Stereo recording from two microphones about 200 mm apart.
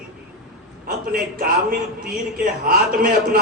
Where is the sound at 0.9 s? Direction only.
45° right (ahead or behind).